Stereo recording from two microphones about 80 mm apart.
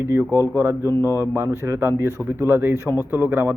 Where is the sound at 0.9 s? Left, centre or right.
Left.